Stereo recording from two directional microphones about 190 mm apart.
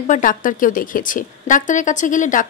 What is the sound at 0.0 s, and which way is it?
A woman's voice, 45° left (ahead or behind).